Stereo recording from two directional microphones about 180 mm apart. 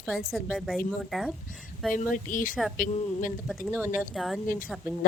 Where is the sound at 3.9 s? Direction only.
Centre (ahead or behind).